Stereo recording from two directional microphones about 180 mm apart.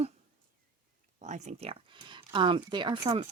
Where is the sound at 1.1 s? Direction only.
40° right (ahead or behind).